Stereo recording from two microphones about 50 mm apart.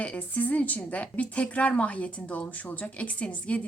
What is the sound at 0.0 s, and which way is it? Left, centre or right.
A woman's voice, left.